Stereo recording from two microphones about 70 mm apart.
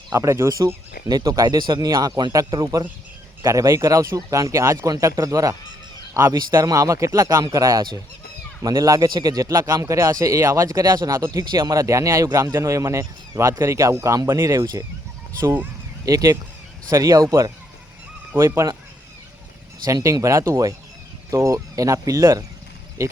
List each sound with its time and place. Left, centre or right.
0.1 s speech: right
1.0 s speech: right
2.5 s speech: right
3.4 s speech: right
6.7 s speech: right
8.6 s speech: right
9.0 s speech: right
16.0 s speech: right
18.3 s speech: right
19.8 s speech: right